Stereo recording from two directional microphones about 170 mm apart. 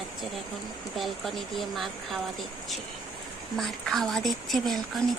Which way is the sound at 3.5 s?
Centre (ahead or behind).